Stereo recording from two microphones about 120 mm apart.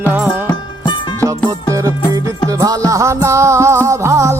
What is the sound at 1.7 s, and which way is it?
Music, 25° right (ahead or behind).